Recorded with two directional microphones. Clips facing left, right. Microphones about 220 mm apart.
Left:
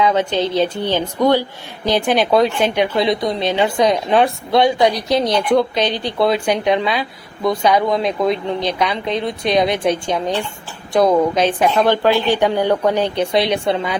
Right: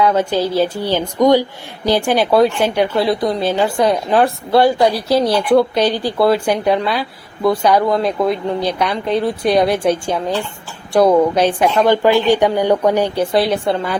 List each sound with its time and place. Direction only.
0.0 s a woman's voice: 10° right (ahead or behind)